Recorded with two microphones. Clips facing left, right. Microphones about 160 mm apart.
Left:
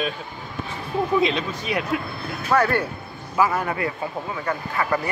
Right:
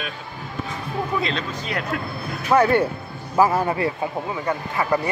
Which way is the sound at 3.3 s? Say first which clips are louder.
Right 3 dB; 35° right (ahead or behind).